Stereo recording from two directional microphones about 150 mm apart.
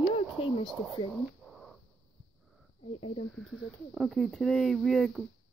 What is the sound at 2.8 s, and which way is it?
Speech, 45° left (ahead or behind).